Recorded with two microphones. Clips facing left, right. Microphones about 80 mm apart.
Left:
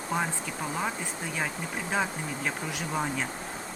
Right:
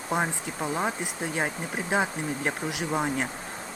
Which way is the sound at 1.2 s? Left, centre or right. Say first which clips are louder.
Right 4 dB; right.